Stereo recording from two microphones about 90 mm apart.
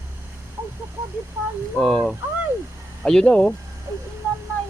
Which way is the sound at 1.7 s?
5° left (ahead or behind).